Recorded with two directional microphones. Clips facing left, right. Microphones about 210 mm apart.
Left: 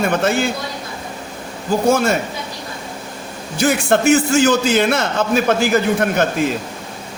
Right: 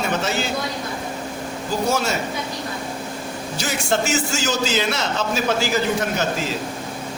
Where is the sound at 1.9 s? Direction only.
55° left (ahead or behind).